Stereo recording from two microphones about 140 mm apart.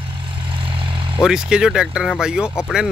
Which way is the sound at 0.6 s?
35° right (ahead or behind).